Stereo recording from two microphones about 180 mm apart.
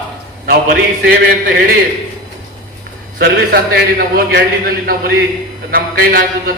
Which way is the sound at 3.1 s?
65° right (ahead or behind).